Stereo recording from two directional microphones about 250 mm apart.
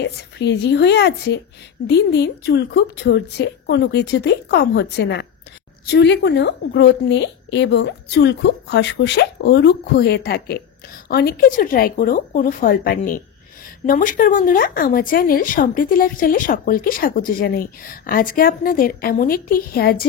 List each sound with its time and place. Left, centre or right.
0.0 s a woman's voice: left